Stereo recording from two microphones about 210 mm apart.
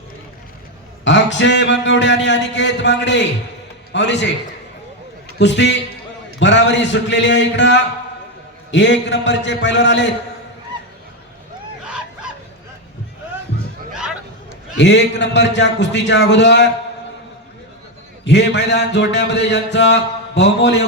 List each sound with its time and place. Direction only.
1.0 s speech: 60° left (ahead or behind)
5.4 s speech: 55° left (ahead or behind)
14.8 s speech: 55° left (ahead or behind)
18.3 s speech: 55° left (ahead or behind)